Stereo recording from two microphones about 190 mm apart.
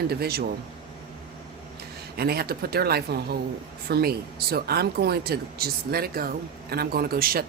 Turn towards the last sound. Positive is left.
turn(degrees=-50)  # may be behind; listen again after turning